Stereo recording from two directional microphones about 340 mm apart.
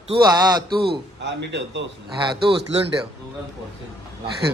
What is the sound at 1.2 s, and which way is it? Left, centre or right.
Speech, right.